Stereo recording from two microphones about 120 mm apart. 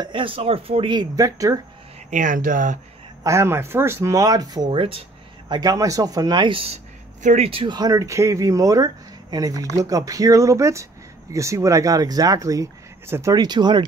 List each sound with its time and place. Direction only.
0.0 s speech: 45° right (ahead or behind); by 1.6 s 30° right (ahead or behind)
2.0 s speech: 90° right
3.3 s speech: 20° right (ahead or behind)
4.7 s speech: 50° right (ahead or behind)
5.5 s speech: 35° right (ahead or behind)
7.2 s speech: 60° right (ahead or behind)
7.7 s speech: 30° right (ahead or behind)
13.3 s speech: 35° right (ahead or behind)